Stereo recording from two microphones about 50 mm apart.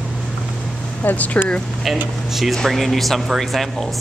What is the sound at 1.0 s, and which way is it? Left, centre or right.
Speech, left.